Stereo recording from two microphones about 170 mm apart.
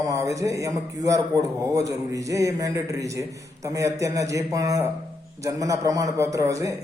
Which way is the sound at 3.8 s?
20° right (ahead or behind).